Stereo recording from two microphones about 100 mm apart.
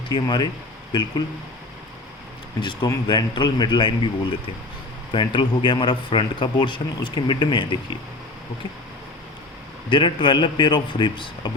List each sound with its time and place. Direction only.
0.1 s a man's voice: 50° left (ahead or behind)
2.6 s a man's voice: 45° left (ahead or behind)
9.9 s a man's voice: 50° left (ahead or behind)